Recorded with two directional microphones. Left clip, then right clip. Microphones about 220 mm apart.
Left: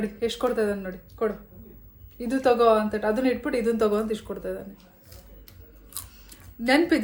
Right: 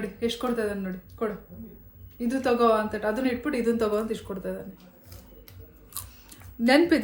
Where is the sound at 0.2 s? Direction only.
20° left (ahead or behind).